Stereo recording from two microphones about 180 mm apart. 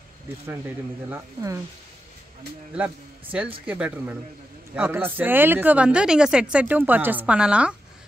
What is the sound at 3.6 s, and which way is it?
Speech, 5° right (ahead or behind).